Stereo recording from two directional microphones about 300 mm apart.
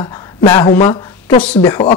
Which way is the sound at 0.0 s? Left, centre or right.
Centre.